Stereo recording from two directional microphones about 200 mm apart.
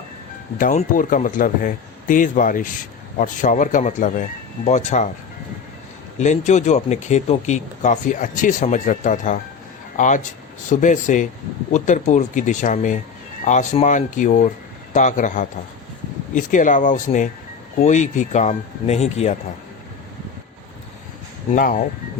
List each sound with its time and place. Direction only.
0.6 s speech: 40° left (ahead or behind)
6.1 s speech: 35° left (ahead or behind)
21.5 s speech: 40° left (ahead or behind)